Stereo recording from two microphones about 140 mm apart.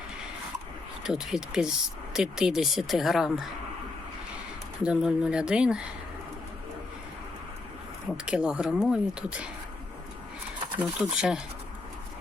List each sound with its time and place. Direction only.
1.0 s speech: 5° right (ahead or behind)
4.8 s speech: 5° right (ahead or behind)
8.1 s speech: 5° right (ahead or behind)
10.8 s speech: 10° right (ahead or behind)